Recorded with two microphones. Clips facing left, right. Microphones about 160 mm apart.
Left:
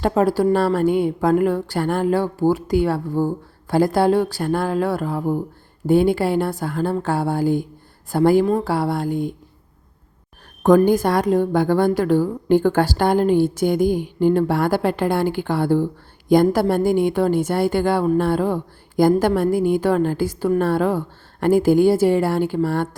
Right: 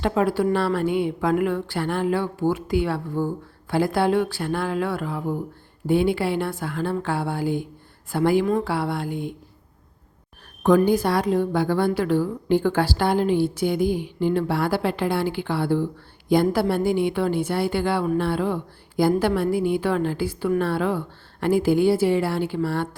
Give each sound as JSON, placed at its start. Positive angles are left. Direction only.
{"t": 0.0, "sound": "a woman's voice", "side_deg": 40}
{"t": 10.6, "sound": "a woman's voice", "side_deg": 45}